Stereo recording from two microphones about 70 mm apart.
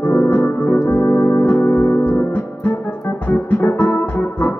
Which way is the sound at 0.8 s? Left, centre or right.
Left.